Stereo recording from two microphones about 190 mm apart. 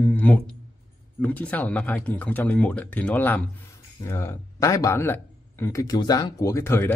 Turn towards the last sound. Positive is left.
turn(degrees=10)  # may be behind; listen again after turning